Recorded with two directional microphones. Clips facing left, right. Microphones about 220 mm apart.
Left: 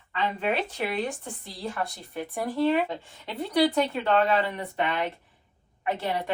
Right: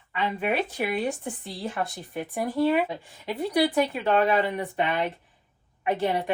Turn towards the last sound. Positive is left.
turn(degrees=-20)  # may be behind; listen again after turning